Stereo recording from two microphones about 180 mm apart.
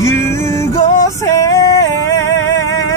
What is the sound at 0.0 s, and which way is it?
Music, 15° left (ahead or behind).